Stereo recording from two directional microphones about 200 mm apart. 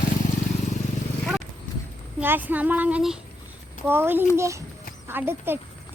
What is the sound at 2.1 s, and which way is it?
Speech, 10° right (ahead or behind).